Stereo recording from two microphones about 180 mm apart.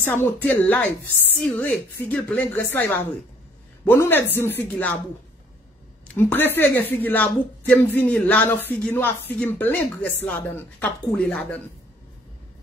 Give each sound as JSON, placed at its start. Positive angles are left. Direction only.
{"t": 0.0, "sound": "speech", "side_deg": 10}
{"t": 6.0, "sound": "speech", "side_deg": 10}